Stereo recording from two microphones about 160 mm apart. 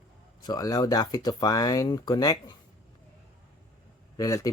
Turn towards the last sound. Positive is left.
turn(degrees=20)  # may be behind; listen again after turning